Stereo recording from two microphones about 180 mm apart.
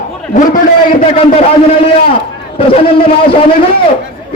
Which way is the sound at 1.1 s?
30° left (ahead or behind).